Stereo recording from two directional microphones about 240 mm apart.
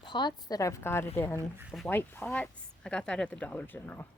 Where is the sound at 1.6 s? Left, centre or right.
Centre.